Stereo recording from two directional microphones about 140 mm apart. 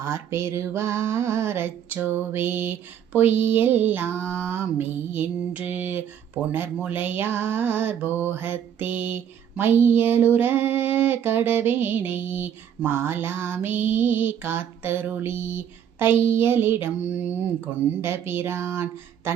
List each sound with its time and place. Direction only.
0.0 s female singing: 20° right (ahead or behind)